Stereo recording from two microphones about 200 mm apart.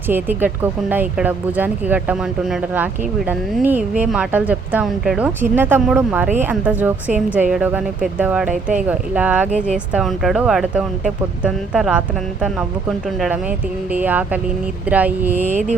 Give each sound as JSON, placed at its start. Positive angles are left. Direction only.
{"t": 0.1, "sound": "speech", "side_deg": -10}